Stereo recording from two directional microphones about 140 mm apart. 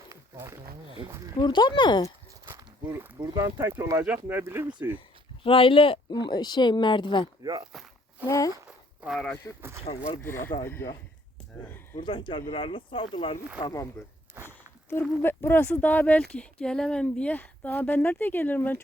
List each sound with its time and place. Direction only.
0.1 s a sound: 20° right (ahead or behind)
1.4 s speech: 35° left (ahead or behind)
2.5 s walk: 20° right (ahead or behind)
3.3 s speech: 20° right (ahead or behind)
4.9 s speech: 40° left (ahead or behind)
7.4 s speech: 30° right (ahead or behind)
8.3 s speech: 25° left (ahead or behind)
9.0 s speech: centre (ahead or behind)
9.9 s speech: 45° left (ahead or behind)
10.2 s speech: 15° left (ahead or behind)
12.0 s speech: 35° left (ahead or behind)
13.6 s speech: 25° left (ahead or behind)
14.4 s a sound: 15° left (ahead or behind)
15.2 s speech: 15° left (ahead or behind)